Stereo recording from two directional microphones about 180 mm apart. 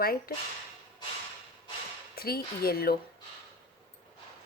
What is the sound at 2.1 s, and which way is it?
Speech, 60° left (ahead or behind).